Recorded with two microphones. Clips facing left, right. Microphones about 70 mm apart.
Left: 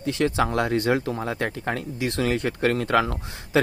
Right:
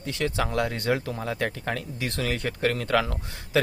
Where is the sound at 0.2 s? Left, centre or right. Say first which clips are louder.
Left 3 dB; left.